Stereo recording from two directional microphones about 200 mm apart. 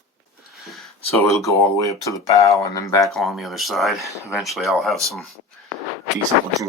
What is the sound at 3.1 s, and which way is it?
Speech, centre (ahead or behind).